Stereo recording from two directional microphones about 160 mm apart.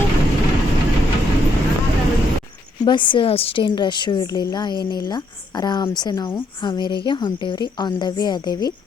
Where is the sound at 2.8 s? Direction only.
30° left (ahead or behind).